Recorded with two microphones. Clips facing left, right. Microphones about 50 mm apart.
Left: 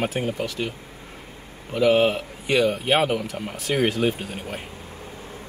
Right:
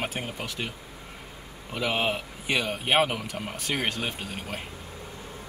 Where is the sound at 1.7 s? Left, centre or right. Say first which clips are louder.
Left 9 dB; centre.